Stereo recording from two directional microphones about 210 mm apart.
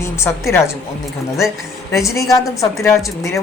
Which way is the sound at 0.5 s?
15° left (ahead or behind).